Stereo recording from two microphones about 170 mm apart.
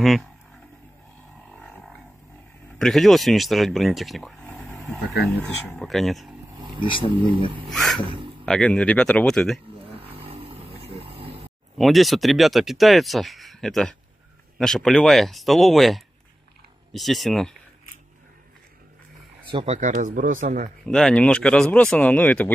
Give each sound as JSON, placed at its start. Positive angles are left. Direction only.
{"t": 0.0, "sound": "speech", "side_deg": 0}
{"t": 1.5, "sound": "a sound", "side_deg": 0}
{"t": 2.8, "sound": "speech", "side_deg": 0}
{"t": 6.5, "sound": "vehicle", "side_deg": -25}
{"t": 7.2, "sound": "speech", "side_deg": -30}
{"t": 7.6, "sound": "speech", "side_deg": 0}
{"t": 9.9, "sound": "vehicle", "side_deg": -35}
{"t": 11.8, "sound": "speech", "side_deg": 0}
{"t": 19.4, "sound": "speech", "side_deg": -30}
{"t": 20.8, "sound": "speech", "side_deg": 5}